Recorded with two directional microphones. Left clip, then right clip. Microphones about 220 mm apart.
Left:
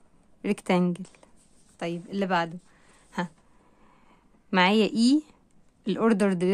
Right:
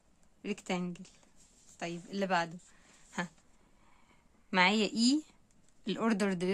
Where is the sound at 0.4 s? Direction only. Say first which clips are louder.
Left 11 dB; 30° left (ahead or behind); by 2.5 s 15° left (ahead or behind).